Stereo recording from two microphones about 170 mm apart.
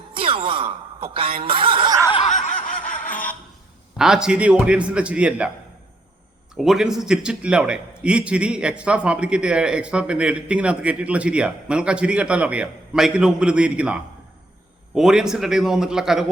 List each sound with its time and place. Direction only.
0.1 s speech: 30° right (ahead or behind)
2.2 s snicker: 45° left (ahead or behind)
3.9 s a man's voice: 5° right (ahead or behind)
6.5 s a man's voice: 5° right (ahead or behind)